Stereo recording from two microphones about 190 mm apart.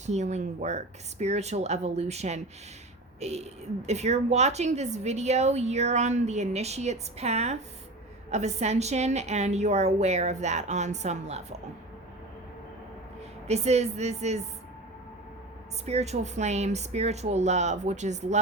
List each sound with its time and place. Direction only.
0.0 s a woman's voice: 35° right (ahead or behind)
13.5 s a woman's voice: 35° right (ahead or behind)
15.9 s a woman's voice: 35° right (ahead or behind)